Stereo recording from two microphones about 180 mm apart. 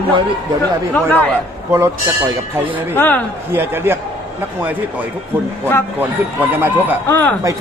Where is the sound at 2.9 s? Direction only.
10° left (ahead or behind).